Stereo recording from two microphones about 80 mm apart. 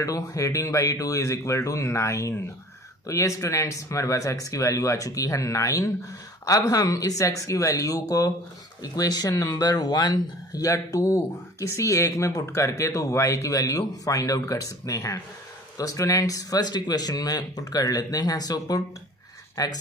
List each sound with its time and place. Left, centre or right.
0.0 s speech: left